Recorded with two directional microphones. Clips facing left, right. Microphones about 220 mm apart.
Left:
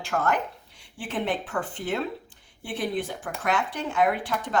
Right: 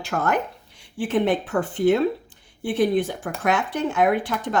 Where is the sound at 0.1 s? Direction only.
40° right (ahead or behind).